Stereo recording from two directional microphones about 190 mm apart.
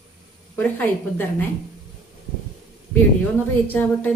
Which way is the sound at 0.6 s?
10° left (ahead or behind).